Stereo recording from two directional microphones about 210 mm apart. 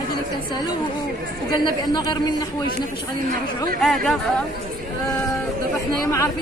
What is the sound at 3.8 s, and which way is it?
Speech, centre (ahead or behind).